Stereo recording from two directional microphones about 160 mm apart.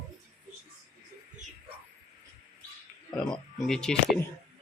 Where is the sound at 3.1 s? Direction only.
5° left (ahead or behind).